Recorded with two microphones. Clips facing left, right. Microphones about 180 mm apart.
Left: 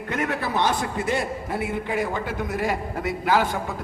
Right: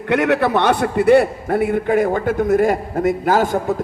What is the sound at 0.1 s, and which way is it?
A man's voice, 75° right (ahead or behind).